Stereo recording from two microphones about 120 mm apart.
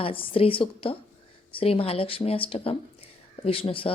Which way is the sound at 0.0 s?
50° left (ahead or behind).